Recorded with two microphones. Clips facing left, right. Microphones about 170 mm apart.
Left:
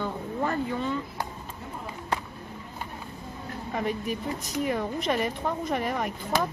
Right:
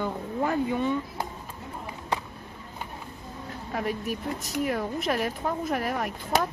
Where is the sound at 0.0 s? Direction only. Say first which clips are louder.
Right 1 dB; 10° right (ahead or behind).